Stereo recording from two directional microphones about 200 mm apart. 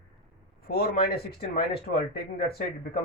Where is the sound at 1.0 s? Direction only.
50° left (ahead or behind).